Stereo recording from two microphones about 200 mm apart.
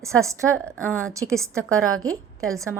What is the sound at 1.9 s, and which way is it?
Speech, 90° right.